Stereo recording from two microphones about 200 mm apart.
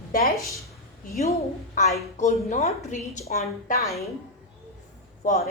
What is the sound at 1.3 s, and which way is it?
A woman's voice, 35° left (ahead or behind).